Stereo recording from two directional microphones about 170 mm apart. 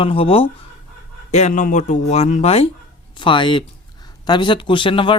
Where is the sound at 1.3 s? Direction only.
45° left (ahead or behind).